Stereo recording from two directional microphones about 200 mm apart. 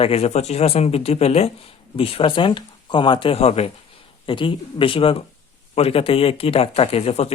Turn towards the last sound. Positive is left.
turn(degrees=30)  # may be behind; listen again after turning